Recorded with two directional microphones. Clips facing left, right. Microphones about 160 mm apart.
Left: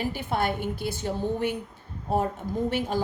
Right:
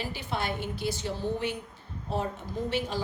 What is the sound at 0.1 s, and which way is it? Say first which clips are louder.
A woman's voice: left 5 dB; 50° left (ahead or behind).